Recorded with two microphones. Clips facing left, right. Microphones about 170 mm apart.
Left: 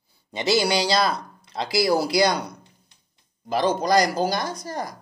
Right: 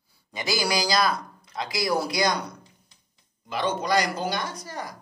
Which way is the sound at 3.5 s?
40° left (ahead or behind).